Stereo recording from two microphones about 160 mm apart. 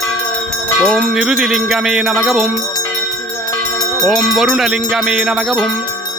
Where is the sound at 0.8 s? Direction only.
Centre (ahead or behind).